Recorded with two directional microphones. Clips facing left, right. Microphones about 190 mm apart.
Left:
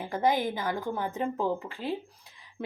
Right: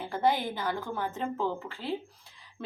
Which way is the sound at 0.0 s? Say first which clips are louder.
Left 1 dB; 15° left (ahead or behind).